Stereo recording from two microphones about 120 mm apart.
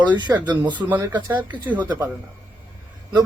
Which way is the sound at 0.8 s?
25° right (ahead or behind).